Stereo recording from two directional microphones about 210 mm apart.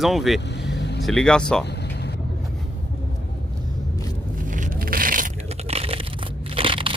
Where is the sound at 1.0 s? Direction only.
5° left (ahead or behind).